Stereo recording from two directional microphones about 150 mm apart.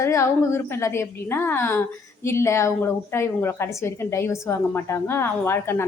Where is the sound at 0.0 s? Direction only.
20° left (ahead or behind).